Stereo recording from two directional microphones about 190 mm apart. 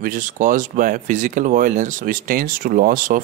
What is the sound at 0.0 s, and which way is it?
Speech, 45° right (ahead or behind).